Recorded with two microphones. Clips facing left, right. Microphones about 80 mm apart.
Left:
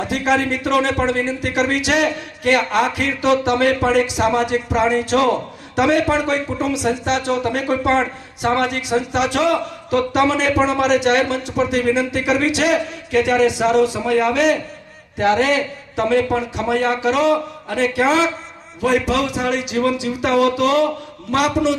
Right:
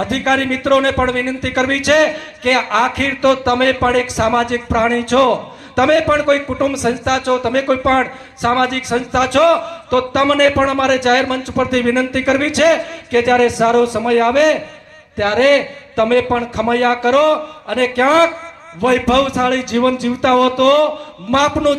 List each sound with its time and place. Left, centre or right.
0.0 s a man's voice: right